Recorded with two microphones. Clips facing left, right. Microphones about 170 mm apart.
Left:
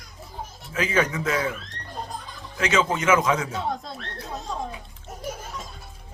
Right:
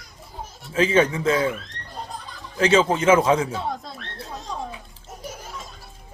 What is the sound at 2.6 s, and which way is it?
Speech, 30° right (ahead or behind).